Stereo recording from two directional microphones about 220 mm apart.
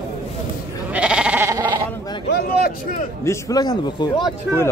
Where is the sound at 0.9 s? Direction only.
5° right (ahead or behind).